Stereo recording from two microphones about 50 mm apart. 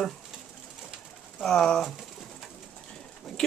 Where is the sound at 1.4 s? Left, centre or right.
Centre.